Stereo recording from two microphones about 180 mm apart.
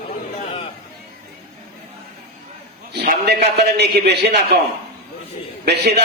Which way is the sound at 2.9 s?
65° right (ahead or behind).